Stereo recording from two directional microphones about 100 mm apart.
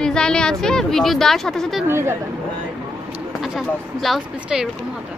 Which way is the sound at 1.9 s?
25° right (ahead or behind).